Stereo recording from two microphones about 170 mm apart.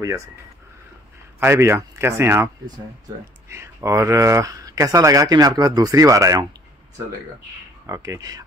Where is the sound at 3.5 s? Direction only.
15° right (ahead or behind).